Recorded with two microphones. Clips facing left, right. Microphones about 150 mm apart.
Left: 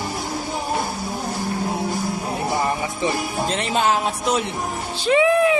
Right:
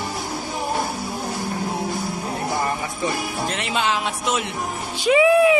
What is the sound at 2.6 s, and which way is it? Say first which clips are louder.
Music: left 2 dB; 20° left (ahead or behind).